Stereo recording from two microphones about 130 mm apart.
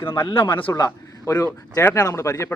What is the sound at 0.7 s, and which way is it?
A man's voice, 25° left (ahead or behind).